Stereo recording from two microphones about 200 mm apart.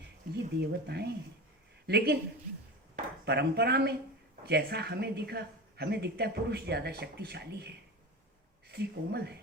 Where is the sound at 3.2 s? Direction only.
55° right (ahead or behind).